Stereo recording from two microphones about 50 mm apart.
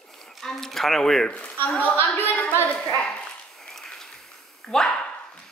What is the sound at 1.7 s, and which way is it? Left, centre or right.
Speech, left.